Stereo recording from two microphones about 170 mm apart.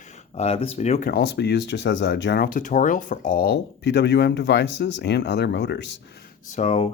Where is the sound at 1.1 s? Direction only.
80° left.